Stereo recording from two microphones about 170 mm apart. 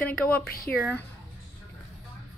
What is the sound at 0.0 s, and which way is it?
A woman's voice, 10° left (ahead or behind).